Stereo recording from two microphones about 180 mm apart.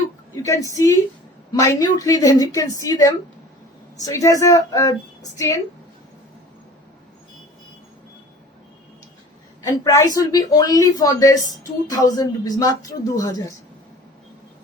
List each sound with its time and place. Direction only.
0.4 s a woman's voice: 20° left (ahead or behind)
9.6 s a woman's voice: 15° left (ahead or behind)